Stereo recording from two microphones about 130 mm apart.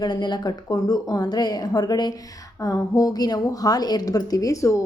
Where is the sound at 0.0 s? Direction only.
35° left (ahead or behind).